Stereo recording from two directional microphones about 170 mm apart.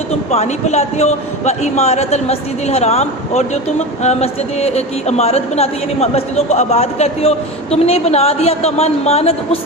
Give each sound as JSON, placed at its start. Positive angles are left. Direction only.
{"t": 0.3, "sound": "a man's voice", "side_deg": 40}